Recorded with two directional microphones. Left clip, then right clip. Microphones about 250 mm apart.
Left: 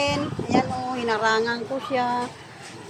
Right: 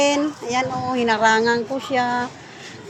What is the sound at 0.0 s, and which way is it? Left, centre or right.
Speech, right.